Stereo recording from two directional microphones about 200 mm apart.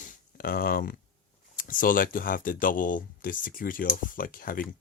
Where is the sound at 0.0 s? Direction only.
45° left (ahead or behind).